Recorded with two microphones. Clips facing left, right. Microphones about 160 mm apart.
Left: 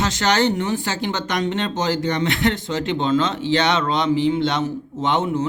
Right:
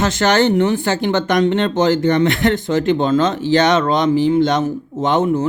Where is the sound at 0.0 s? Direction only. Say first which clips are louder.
Right 4 dB; 50° right (ahead or behind).